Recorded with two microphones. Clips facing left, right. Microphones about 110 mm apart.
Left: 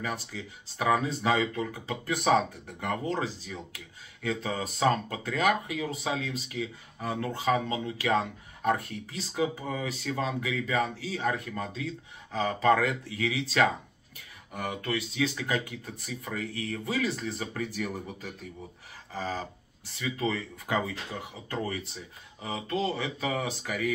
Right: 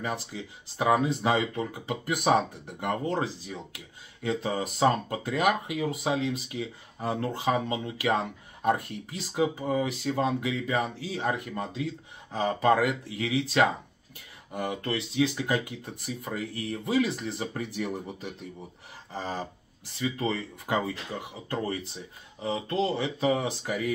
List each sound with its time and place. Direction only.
0.0 s speech: 20° right (ahead or behind)
22.4 s speech: 20° right (ahead or behind)